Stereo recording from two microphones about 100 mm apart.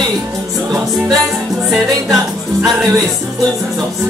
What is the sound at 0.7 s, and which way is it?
Music, 30° right (ahead or behind).